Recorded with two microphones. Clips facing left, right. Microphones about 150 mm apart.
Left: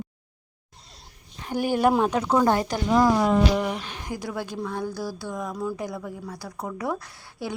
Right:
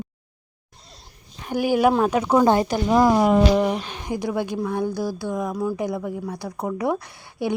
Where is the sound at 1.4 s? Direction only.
10° right (ahead or behind).